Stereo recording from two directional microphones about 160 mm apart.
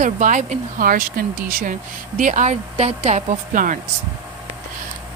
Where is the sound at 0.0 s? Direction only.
55° right (ahead or behind).